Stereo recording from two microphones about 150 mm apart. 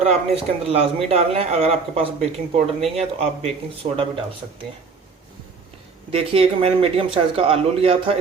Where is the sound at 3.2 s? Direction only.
40° right (ahead or behind).